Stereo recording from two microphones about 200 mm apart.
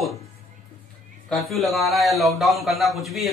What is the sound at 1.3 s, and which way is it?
A woman's voice, centre (ahead or behind).